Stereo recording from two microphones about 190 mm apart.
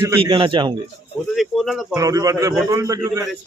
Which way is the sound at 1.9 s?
20° right (ahead or behind).